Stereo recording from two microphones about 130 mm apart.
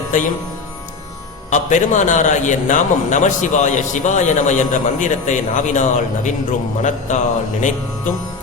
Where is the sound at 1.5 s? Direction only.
70° left (ahead or behind).